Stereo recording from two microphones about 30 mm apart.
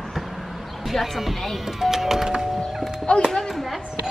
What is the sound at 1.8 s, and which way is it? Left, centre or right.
Music, centre.